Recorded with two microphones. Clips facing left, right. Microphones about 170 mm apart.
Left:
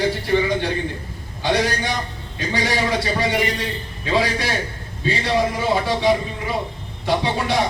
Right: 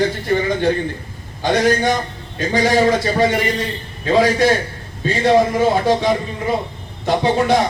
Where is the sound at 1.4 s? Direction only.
45° right (ahead or behind).